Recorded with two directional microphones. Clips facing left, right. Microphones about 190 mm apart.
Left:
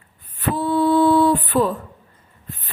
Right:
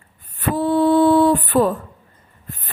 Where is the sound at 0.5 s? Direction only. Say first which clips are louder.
Right 2 dB; 50° right (ahead or behind).